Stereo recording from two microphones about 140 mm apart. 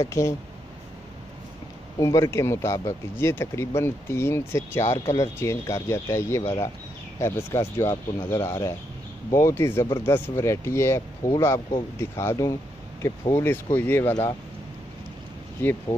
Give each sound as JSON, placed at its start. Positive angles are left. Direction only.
{"t": 0.0, "sound": "speech", "side_deg": 20}
{"t": 2.0, "sound": "speech", "side_deg": 25}
{"t": 15.9, "sound": "speech", "side_deg": 15}